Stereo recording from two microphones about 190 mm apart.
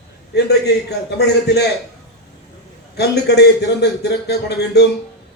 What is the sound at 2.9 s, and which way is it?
A man's voice, 60° left (ahead or behind).